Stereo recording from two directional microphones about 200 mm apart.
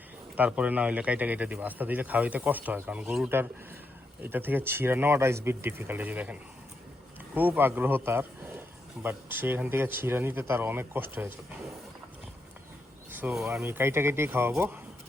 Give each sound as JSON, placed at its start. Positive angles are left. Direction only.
{"t": 0.3, "sound": "speech", "side_deg": -5}
{"t": 7.3, "sound": "speech", "side_deg": -10}
{"t": 13.1, "sound": "speech", "side_deg": -10}